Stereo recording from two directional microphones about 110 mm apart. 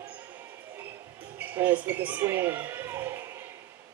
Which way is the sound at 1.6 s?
15° right (ahead or behind).